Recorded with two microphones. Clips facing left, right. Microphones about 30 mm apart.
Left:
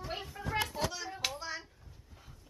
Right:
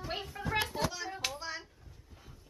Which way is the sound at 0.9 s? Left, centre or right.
Centre.